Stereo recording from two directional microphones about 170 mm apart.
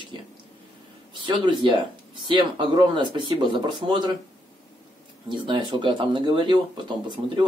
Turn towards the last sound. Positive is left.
turn(degrees=-25)  # may be behind; listen again after turning